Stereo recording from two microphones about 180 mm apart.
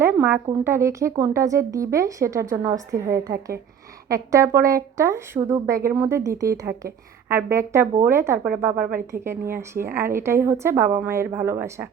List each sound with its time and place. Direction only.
0.0 s a woman's voice: 10° right (ahead or behind)